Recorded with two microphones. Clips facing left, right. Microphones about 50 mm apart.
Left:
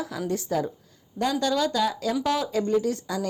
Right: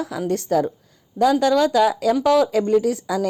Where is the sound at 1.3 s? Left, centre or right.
Right.